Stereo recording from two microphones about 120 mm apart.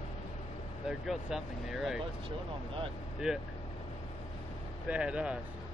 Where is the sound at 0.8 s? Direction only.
5° right (ahead or behind).